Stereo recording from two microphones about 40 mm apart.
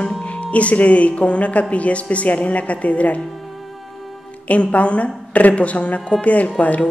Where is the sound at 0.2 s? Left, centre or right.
Left.